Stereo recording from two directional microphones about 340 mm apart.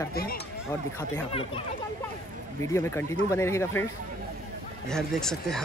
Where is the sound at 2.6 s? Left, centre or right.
Centre.